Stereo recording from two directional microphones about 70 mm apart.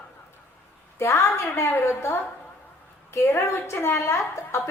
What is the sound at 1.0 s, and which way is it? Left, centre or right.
A woman's voice, left.